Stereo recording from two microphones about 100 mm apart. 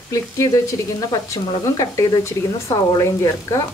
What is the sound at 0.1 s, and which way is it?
Speech, 35° left (ahead or behind).